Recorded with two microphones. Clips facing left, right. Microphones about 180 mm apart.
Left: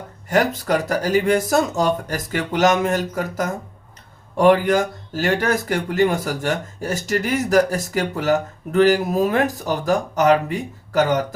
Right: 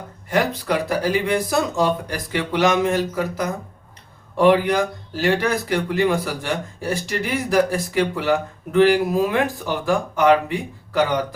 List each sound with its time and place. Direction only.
0.3 s speech: 45° left (ahead or behind)